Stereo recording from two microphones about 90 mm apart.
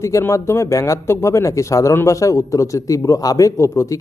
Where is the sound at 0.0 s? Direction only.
30° left (ahead or behind).